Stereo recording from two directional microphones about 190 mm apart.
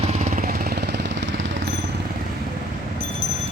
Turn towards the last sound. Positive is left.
turn(degrees=-70)  # may be behind; listen again after turning